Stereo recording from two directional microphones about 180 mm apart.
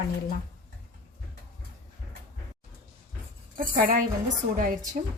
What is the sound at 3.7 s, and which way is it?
A woman's voice, 50° right (ahead or behind).